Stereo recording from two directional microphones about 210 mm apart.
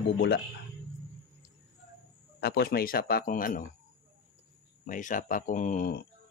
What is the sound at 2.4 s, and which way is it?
Speech, 50° left (ahead or behind).